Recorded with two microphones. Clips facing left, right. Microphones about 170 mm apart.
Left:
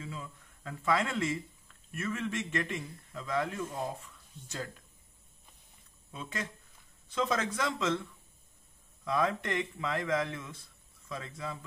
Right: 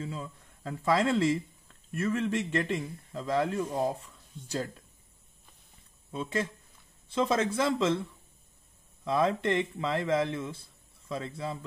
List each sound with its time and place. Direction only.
0.0 s speech: 40° right (ahead or behind)
7.1 s a man's voice: 30° right (ahead or behind)
9.0 s a man's voice: 30° right (ahead or behind)